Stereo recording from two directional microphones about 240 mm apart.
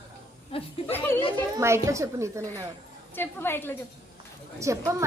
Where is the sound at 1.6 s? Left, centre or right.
Centre.